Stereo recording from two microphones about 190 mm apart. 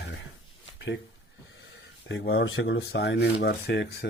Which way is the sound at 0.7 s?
70° left (ahead or behind).